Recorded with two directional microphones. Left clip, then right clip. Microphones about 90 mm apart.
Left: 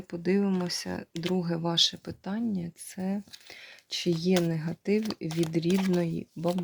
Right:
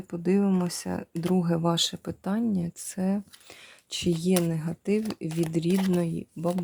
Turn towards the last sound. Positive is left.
turn(degrees=-10)  # may be behind; listen again after turning